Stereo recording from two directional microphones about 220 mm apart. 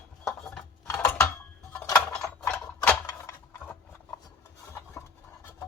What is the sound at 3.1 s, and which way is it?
Mechanisms, 15° left (ahead or behind).